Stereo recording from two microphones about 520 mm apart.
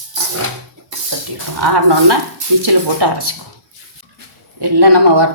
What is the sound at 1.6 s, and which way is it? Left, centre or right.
Speech, right.